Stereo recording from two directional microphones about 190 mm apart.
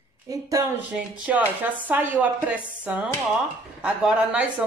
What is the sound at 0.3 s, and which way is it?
Speech, 20° right (ahead or behind).